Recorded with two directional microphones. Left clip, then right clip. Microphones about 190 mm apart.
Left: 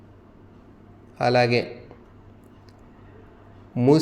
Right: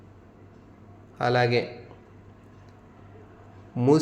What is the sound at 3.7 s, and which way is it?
Speech, 10° left (ahead or behind).